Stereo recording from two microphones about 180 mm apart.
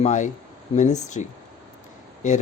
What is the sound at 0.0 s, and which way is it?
Speech, 40° left (ahead or behind).